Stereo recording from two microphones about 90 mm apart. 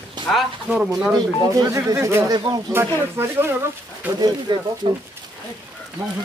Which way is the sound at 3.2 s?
25° right (ahead or behind).